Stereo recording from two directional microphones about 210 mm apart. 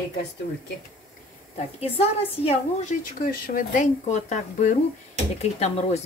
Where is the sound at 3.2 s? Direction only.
40° left (ahead or behind).